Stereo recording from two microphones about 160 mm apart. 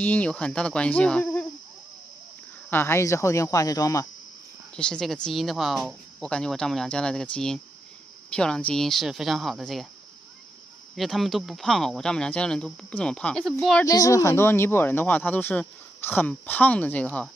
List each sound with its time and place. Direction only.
0.0 s speech: 10° left (ahead or behind)
2.7 s speech: 15° left (ahead or behind)
4.7 s speech: 5° left (ahead or behind)
11.0 s speech: centre (ahead or behind)
13.8 s speech: 20° left (ahead or behind)